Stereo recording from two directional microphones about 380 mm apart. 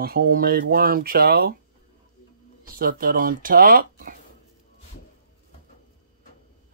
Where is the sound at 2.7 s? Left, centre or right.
Right.